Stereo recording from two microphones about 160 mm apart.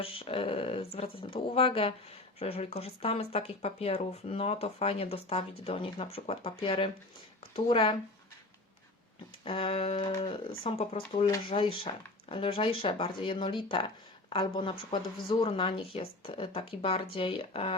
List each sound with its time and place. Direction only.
0.0 s speech: 35° left (ahead or behind)
9.4 s speech: 35° left (ahead or behind)